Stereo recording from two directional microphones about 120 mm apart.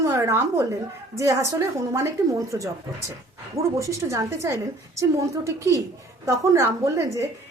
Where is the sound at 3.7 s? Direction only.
25° right (ahead or behind).